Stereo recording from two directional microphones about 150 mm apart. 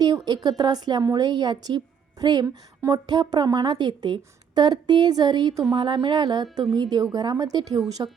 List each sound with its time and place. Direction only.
0.3 s a woman's voice: 30° right (ahead or behind)